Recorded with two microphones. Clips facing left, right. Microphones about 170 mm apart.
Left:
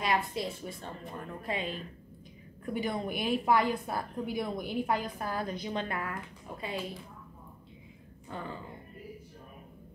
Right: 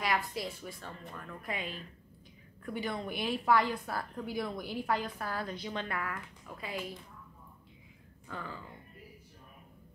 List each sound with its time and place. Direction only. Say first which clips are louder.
0.0 s a woman's voice: left 3 dB; 25° left (ahead or behind)
2.8 s a woman's voice: left 3 dB; 20° left (ahead or behind)
8.3 s a woman's voice: left 3 dB; 25° left (ahead or behind)